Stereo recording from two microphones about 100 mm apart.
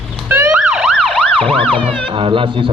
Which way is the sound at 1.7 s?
60° right (ahead or behind).